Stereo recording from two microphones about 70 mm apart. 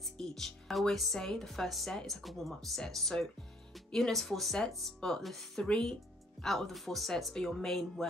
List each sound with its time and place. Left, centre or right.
0.0 s speech: centre